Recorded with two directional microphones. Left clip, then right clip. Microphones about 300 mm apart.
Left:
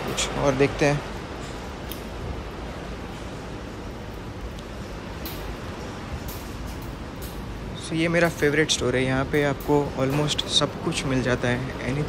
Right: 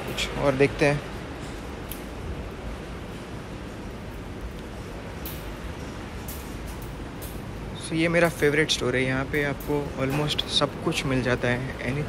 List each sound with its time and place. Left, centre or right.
0.1 s speech: centre
7.9 s speech: centre